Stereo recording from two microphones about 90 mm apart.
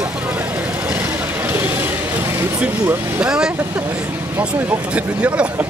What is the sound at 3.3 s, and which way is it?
Speech, 10° right (ahead or behind).